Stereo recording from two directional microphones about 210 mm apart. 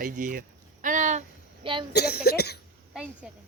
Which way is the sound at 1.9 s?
50° left (ahead or behind).